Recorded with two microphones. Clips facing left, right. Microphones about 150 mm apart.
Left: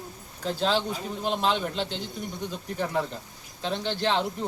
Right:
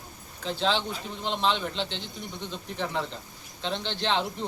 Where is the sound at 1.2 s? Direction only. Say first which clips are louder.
Left 1 dB; 10° left (ahead or behind).